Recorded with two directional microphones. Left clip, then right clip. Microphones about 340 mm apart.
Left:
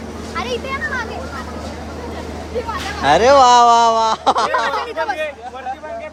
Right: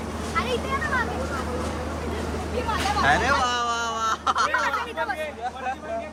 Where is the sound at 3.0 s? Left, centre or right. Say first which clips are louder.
Left 13 dB; centre.